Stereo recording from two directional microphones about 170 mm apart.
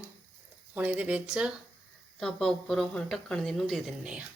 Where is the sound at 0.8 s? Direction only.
10° right (ahead or behind).